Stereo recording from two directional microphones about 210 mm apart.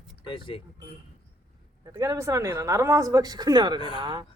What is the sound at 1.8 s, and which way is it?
Speech, 15° right (ahead or behind).